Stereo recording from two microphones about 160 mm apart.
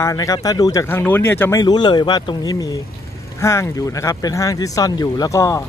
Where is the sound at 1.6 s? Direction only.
25° left (ahead or behind).